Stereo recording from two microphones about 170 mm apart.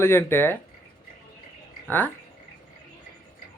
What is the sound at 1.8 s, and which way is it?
Speech, 10° left (ahead or behind).